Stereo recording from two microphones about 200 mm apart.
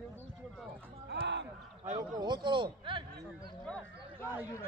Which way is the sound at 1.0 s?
60° right (ahead or behind).